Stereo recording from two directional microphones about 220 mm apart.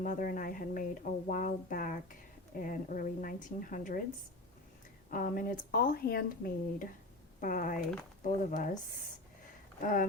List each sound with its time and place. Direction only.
0.0 s speech: 40° left (ahead or behind)
5.1 s speech: 40° left (ahead or behind)
9.8 s speech: 40° left (ahead or behind)